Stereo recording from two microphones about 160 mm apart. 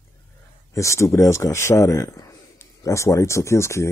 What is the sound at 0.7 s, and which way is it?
A man's voice, 20° left (ahead or behind).